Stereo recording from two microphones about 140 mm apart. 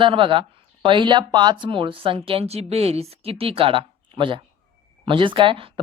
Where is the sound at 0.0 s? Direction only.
40° right (ahead or behind).